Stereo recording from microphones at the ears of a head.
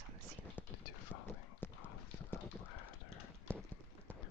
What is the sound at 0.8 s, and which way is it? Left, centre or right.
Clip-clop, left.